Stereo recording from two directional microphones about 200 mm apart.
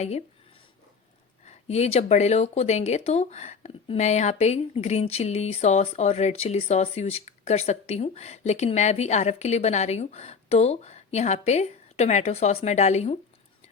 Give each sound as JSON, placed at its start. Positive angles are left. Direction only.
{"t": 1.5, "sound": "speech", "side_deg": 35}